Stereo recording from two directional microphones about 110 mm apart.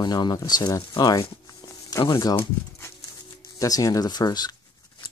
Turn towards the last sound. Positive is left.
turn(degrees=40)  # may be behind; listen again after turning